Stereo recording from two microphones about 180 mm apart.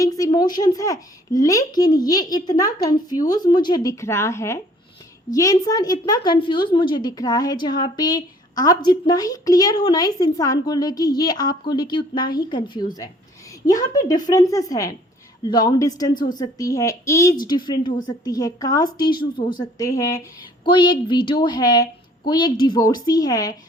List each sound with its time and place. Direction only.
0.0 s a woman's voice: 20° left (ahead or behind)